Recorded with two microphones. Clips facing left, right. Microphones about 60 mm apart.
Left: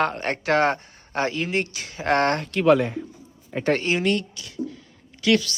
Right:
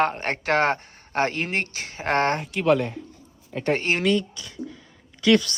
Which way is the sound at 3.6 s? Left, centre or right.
Centre.